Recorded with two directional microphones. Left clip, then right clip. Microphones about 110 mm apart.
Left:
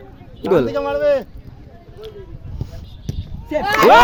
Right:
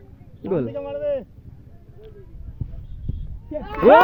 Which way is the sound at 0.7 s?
30° right (ahead or behind).